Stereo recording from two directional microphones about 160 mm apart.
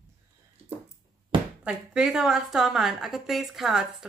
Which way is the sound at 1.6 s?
5° right (ahead or behind).